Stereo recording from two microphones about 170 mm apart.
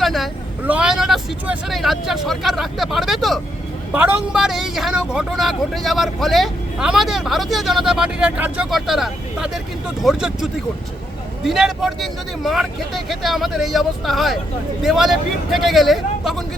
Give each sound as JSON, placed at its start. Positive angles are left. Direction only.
{"t": 0.0, "sound": "vehicle", "side_deg": 0}
{"t": 0.6, "sound": "speech", "side_deg": -5}